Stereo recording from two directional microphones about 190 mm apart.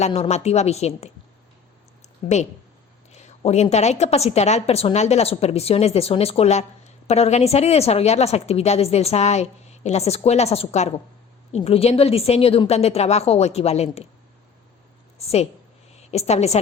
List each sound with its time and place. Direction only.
0.0 s a woman's voice: 35° left (ahead or behind)
2.2 s a woman's voice: 30° left (ahead or behind)
15.2 s a woman's voice: 30° left (ahead or behind)